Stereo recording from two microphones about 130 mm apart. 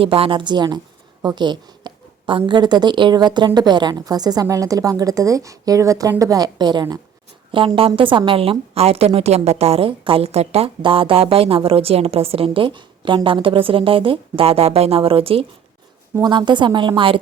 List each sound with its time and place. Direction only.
0.0 s a woman's voice: 45° right (ahead or behind)
16.2 s a woman's voice: 35° right (ahead or behind)